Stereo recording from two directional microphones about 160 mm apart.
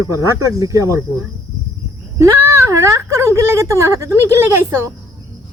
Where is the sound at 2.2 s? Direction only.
15° right (ahead or behind).